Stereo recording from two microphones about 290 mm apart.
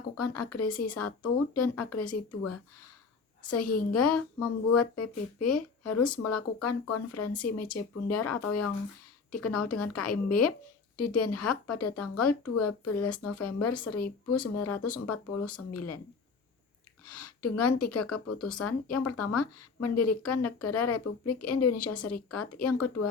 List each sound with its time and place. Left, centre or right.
0.2 s a woman's voice: left
17.1 s a woman's voice: left